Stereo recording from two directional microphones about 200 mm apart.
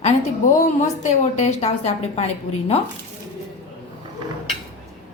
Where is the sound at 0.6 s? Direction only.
35° left (ahead or behind).